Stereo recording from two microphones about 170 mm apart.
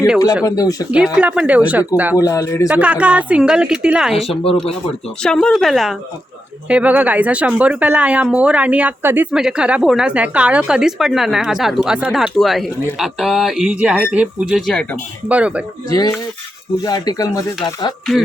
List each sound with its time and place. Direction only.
0.4 s speech: 20° left (ahead or behind)
0.9 s speech: 10° right (ahead or behind)
2.1 s speech: 20° left (ahead or behind)
2.6 s speech: 10° right (ahead or behind)
15.9 s speech: 20° left (ahead or behind)